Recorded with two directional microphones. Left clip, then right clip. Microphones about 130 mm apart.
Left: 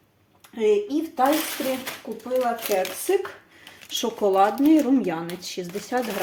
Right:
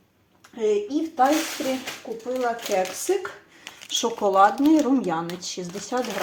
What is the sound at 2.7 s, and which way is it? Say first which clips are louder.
Speech: even; 45° left (ahead or behind).